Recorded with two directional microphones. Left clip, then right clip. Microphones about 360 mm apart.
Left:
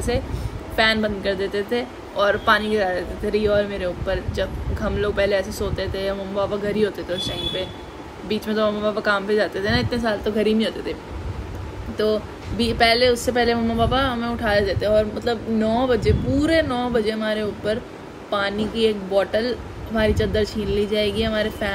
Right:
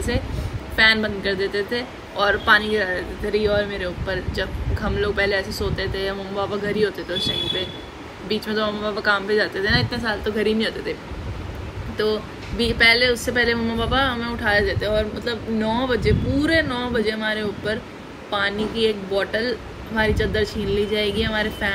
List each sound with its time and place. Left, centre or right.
0.7 s speech: centre
12.0 s speech: centre